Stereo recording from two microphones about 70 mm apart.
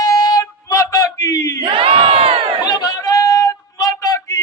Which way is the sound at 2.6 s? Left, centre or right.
Left.